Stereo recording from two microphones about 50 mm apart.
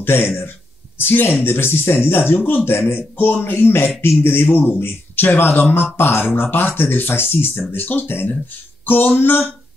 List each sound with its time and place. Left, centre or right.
0.0 s speech: left
7.7 s speech: left
8.8 s a sound: left
9.1 s speech: left